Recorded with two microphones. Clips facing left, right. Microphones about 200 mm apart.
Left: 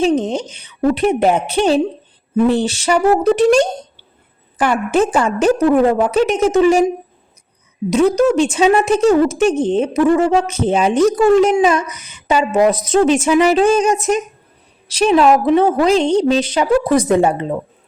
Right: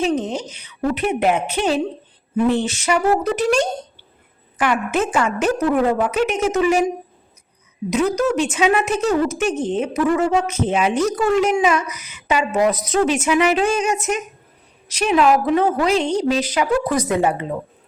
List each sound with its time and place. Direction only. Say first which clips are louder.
0.3 s a woman's voice: left 5 dB; 30° left (ahead or behind)